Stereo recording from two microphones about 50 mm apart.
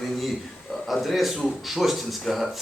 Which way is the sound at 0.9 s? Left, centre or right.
Centre.